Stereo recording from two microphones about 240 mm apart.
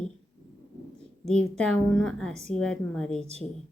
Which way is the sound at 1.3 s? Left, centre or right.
Centre.